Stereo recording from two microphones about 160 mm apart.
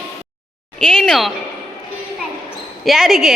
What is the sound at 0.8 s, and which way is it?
Speech, 5° left (ahead or behind).